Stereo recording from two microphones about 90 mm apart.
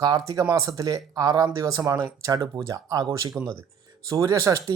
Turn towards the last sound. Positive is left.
turn(degrees=-40)  # may be behind; listen again after turning